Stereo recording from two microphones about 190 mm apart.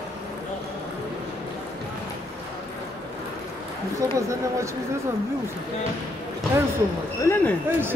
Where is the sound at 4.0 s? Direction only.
15° right (ahead or behind).